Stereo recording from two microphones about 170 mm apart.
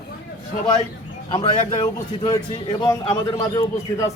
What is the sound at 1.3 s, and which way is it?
A man's voice, 30° left (ahead or behind).